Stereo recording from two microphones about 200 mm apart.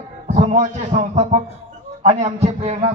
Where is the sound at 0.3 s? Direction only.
35° right (ahead or behind).